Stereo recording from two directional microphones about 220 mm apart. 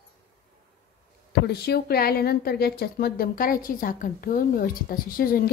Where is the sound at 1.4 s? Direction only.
45° left (ahead or behind).